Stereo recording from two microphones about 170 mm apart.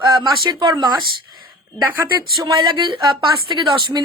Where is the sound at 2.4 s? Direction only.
25° right (ahead or behind).